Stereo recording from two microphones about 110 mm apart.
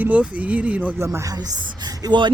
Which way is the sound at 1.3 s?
35° right (ahead or behind).